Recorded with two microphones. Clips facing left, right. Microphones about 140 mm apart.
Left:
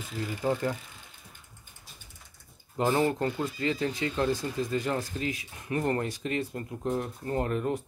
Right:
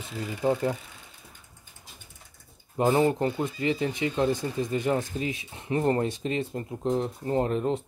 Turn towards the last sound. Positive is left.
turn(degrees=-20)  # may be behind; listen again after turning